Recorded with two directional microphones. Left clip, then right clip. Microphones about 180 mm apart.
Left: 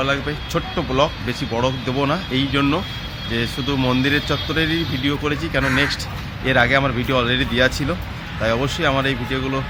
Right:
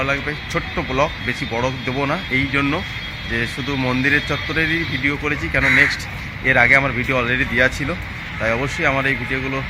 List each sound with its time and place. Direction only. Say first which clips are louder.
0.0 s speech: even; 15° left (ahead or behind)